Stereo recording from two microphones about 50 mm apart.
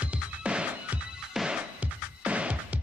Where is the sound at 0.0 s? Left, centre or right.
Right.